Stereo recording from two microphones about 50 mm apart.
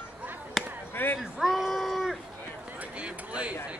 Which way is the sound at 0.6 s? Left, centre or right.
Centre.